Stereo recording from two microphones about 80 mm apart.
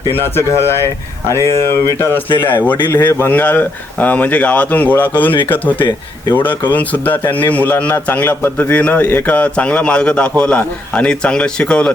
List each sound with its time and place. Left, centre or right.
0.3 s a man's voice: left; by 11.9 s centre